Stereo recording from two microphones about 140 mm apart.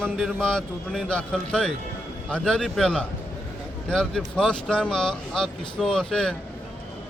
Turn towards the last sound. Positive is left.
turn(degrees=5)  # may be behind; listen again after turning